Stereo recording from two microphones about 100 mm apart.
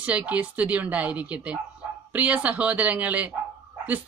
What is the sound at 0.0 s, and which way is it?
Speech, 15° right (ahead or behind).